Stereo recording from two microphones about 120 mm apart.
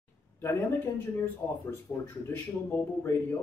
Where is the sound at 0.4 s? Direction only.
20° left (ahead or behind).